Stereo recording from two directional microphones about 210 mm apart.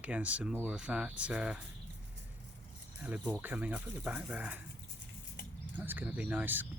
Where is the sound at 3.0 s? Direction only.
5° right (ahead or behind).